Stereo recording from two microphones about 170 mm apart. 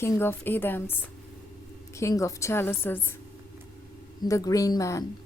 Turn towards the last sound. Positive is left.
turn(degrees=20)  # may be behind; listen again after turning